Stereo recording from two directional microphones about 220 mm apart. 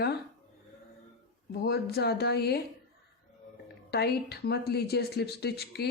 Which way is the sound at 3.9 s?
45° left (ahead or behind).